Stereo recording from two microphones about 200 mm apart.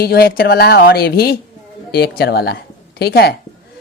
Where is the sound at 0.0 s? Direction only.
50° left (ahead or behind).